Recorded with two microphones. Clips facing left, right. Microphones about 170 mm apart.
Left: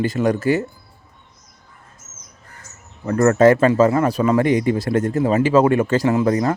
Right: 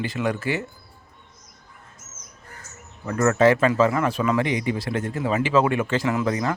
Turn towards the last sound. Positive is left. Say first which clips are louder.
# left 6 dB
turn(degrees=40)  # may be behind; listen again after turning